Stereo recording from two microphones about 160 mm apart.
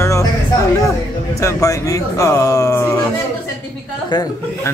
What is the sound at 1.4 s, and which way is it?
Speech, 20° left (ahead or behind).